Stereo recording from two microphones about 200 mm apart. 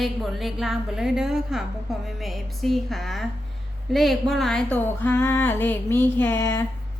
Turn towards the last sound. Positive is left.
turn(degrees=15)  # may be behind; listen again after turning